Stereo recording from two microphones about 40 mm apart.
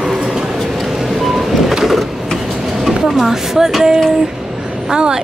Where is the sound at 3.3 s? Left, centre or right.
Centre.